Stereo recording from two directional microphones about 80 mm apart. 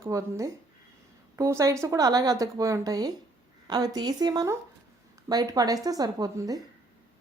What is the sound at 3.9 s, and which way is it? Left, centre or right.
A woman's voice, right.